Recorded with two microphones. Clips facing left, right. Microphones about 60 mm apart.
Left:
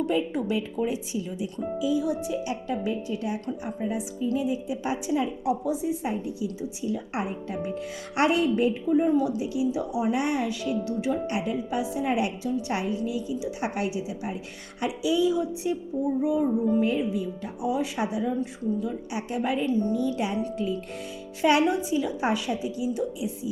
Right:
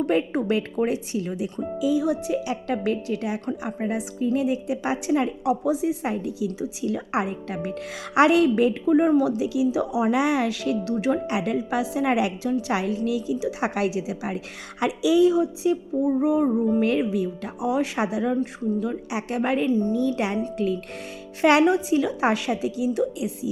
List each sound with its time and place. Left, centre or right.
0.0 s a woman's voice: right
1.8 s a woman's voice: right
2.2 s a woman's voice: right
2.7 s a woman's voice: right
10.8 s a woman's voice: right
16.1 s a woman's voice: right
16.8 s a woman's voice: right
18.8 s a woman's voice: right
19.6 s a woman's voice: right
19.9 s a woman's voice: right
21.4 s a woman's voice: right